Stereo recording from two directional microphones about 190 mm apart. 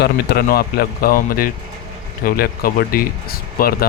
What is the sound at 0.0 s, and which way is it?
Speech, 55° left (ahead or behind).